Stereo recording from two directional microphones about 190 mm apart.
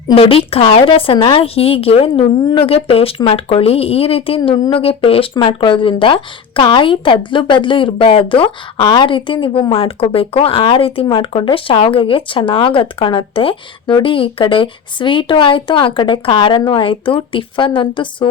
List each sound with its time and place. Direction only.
0.1 s a woman's voice: 30° left (ahead or behind)